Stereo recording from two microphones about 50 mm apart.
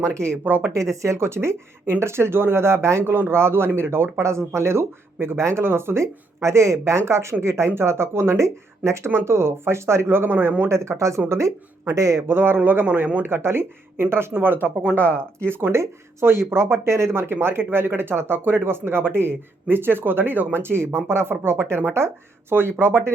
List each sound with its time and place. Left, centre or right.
0.0 s speech: right
0.4 s speech: right
0.7 s speech: right
3.1 s speech: right
9.0 s speech: right
10.7 s speech: right
11.3 s speech: right
12.3 s speech: right
12.5 s a man's voice: right
13.2 s speech: right
14.4 s a man's voice: right
14.9 s speech: left
16.2 s speech: right